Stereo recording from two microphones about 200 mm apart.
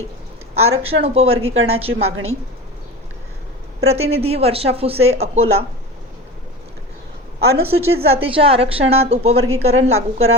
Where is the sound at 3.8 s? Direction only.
30° right (ahead or behind).